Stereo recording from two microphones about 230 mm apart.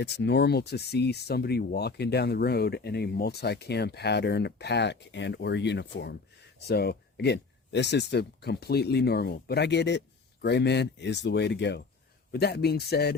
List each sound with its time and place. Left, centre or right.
0.0 s speech: left